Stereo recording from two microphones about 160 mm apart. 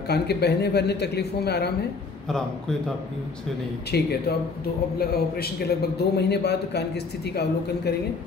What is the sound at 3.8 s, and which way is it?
A woman's voice, 80° left.